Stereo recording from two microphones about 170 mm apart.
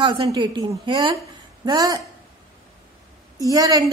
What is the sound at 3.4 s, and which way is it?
Speech, 20° right (ahead or behind).